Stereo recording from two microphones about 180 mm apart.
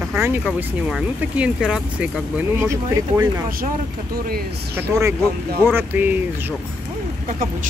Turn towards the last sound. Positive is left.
turn(degrees=-10)  # may be behind; listen again after turning